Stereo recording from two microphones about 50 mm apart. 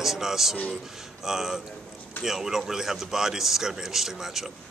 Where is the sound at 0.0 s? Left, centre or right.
Centre.